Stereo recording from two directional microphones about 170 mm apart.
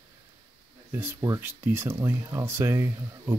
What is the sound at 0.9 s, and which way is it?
Speech, 10° right (ahead or behind).